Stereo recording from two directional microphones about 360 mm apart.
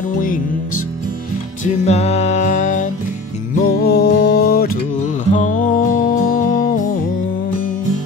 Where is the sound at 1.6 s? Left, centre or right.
Centre.